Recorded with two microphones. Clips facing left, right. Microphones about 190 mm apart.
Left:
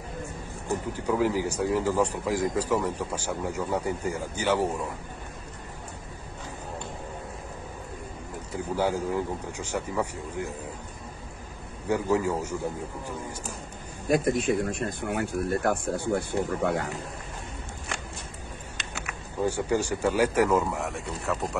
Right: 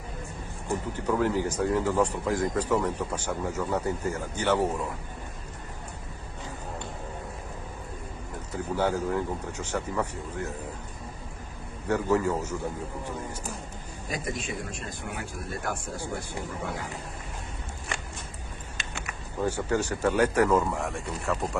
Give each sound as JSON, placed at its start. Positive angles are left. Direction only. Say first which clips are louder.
{"t": 0.9, "sound": "a man's voice", "louder": "even", "side_deg": 10}
{"t": 8.7, "sound": "a man's voice", "louder": "even", "side_deg": 10}
{"t": 11.9, "sound": "a man's voice", "louder": "even", "side_deg": 15}
{"t": 14.0, "sound": "speech", "louder": "left 10 dB", "side_deg": 55}
{"t": 18.8, "sound": "speech", "louder": "even", "side_deg": 5}